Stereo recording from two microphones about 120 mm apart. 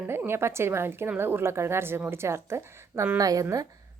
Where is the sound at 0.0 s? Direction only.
15° right (ahead or behind).